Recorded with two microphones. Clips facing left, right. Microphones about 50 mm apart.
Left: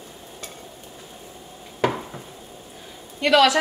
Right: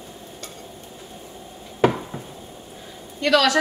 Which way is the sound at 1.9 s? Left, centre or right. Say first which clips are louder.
Right 3 dB; centre.